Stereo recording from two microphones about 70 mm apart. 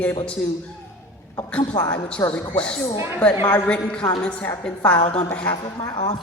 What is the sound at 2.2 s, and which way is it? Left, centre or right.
Speech, left.